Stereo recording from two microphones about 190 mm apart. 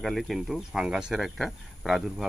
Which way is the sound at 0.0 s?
Centre (ahead or behind).